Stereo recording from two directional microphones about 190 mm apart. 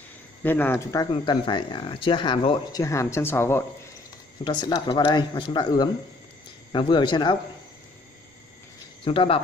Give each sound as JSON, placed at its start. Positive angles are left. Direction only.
{"t": 0.4, "sound": "speech", "side_deg": 10}
{"t": 4.5, "sound": "speech", "side_deg": 25}
{"t": 9.0, "sound": "speech", "side_deg": 30}